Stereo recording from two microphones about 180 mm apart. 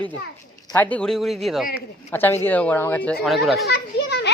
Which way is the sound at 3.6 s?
65° left (ahead or behind).